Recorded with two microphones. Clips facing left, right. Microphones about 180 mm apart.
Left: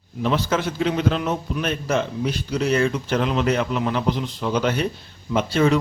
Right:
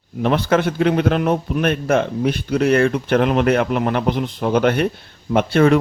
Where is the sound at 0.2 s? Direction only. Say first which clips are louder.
Right 5 dB; 60° right (ahead or behind).